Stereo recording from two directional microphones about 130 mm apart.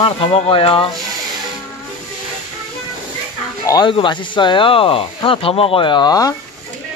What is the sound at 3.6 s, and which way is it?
Speech, 30° left (ahead or behind).